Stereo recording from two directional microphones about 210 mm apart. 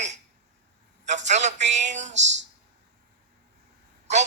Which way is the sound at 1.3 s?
35° right (ahead or behind).